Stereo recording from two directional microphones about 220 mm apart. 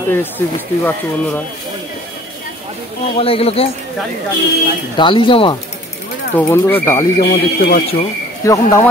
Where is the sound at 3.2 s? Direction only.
25° left (ahead or behind).